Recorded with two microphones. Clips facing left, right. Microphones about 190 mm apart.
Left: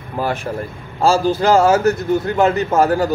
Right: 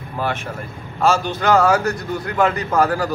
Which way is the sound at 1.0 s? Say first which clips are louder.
Left 3 dB; 30° left (ahead or behind).